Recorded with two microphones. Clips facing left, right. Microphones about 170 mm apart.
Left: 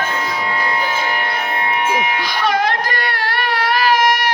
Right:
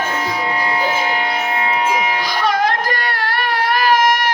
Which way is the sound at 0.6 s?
20° right (ahead or behind).